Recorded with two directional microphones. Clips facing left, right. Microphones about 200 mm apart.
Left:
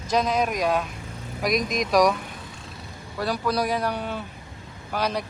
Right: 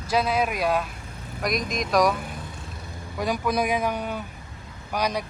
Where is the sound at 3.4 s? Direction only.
15° right (ahead or behind).